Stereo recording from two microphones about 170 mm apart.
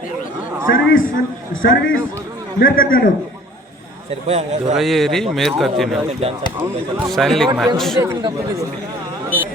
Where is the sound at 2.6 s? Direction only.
60° left (ahead or behind).